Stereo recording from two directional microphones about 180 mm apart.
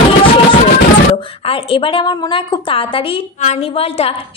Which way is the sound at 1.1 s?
30° left (ahead or behind).